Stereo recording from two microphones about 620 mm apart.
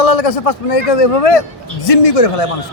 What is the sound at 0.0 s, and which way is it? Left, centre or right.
A man's voice, left.